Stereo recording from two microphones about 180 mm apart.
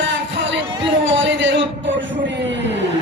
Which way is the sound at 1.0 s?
90° right.